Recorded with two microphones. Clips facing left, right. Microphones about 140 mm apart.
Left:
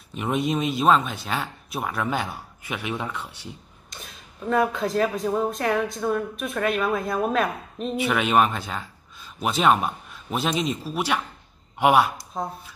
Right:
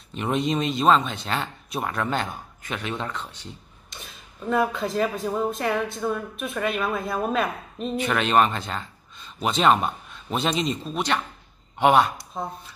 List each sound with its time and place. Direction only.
0.1 s speech: 5° left (ahead or behind)
3.9 s speech: centre (ahead or behind)